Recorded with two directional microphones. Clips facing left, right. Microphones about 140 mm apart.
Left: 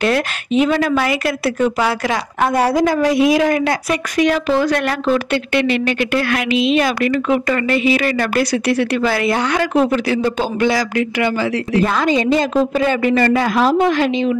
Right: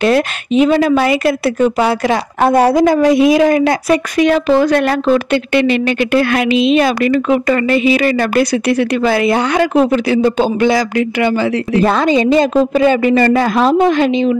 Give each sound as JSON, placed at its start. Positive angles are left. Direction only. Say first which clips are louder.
{"t": 0.0, "sound": "a woman's voice", "louder": "right 5 dB", "side_deg": -25}
{"t": 13.2, "sound": "speech", "louder": "right 3 dB", "side_deg": -40}
{"t": 13.6, "sound": "a woman's voice", "louder": "right 3 dB", "side_deg": -25}